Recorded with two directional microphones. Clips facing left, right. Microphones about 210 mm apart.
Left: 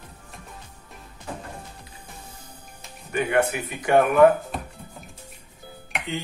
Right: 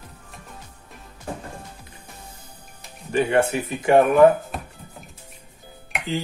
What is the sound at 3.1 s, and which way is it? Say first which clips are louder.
Speech: right 3 dB; 30° right (ahead or behind).